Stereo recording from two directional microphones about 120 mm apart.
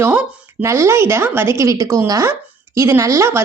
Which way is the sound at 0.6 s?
25° right (ahead or behind).